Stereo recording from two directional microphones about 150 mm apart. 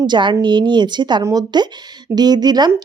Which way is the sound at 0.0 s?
30° right (ahead or behind).